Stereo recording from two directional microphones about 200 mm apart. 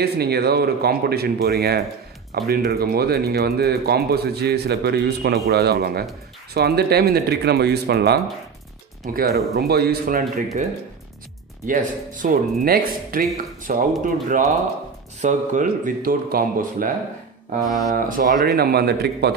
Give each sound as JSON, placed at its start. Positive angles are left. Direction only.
{"t": 0.0, "sound": "speech", "side_deg": -50}
{"t": 11.6, "sound": "speech", "side_deg": -40}
{"t": 17.6, "sound": "speech", "side_deg": 20}
{"t": 17.9, "sound": "speech", "side_deg": -45}